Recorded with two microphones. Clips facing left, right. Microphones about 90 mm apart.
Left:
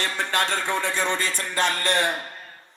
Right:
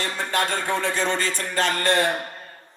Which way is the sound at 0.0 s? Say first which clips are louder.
Even; 15° right (ahead or behind).